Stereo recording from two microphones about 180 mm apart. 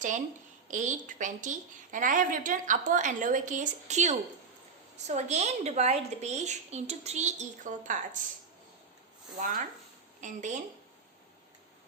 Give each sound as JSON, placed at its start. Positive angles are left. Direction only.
{"t": 0.7, "sound": "a woman's voice", "side_deg": -45}
{"t": 9.4, "sound": "a woman's voice", "side_deg": -50}